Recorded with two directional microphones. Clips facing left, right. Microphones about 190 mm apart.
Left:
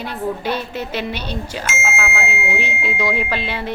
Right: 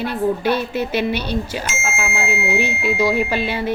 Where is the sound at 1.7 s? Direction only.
55° right (ahead or behind).